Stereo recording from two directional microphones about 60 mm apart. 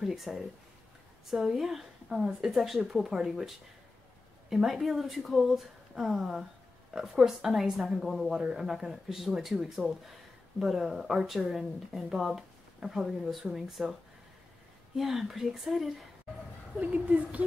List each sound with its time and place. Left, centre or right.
0.0 s speech: centre
15.0 s speech: centre
16.7 s speech: right